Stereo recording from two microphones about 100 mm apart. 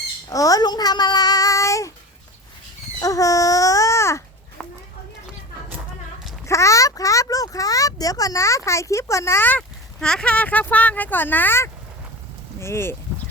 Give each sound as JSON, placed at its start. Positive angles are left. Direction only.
{"t": 0.3, "sound": "speech", "side_deg": 35}
{"t": 3.0, "sound": "a sound", "side_deg": 35}
{"t": 4.6, "sound": "clip-clop", "side_deg": -5}
{"t": 6.4, "sound": "speech", "side_deg": 30}